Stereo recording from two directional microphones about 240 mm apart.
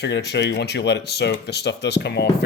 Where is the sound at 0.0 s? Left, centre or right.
Left.